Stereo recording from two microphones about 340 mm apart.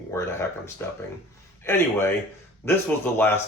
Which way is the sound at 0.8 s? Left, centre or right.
Centre.